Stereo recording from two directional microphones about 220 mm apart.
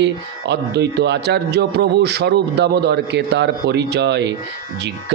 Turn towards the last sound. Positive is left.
turn(degrees=-50)  # may be behind; listen again after turning